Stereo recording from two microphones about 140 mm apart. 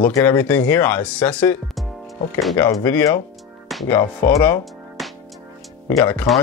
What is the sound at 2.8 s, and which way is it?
Speech, 15° left (ahead or behind).